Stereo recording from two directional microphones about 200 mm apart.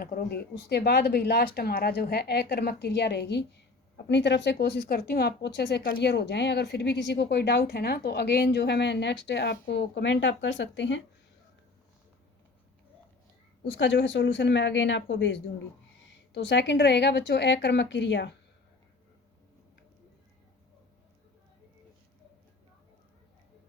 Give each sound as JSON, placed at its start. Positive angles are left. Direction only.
{"t": 0.0, "sound": "speech", "side_deg": 45}
{"t": 13.7, "sound": "speech", "side_deg": 65}